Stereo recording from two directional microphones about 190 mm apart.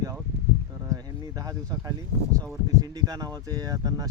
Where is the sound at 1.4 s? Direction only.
20° right (ahead or behind).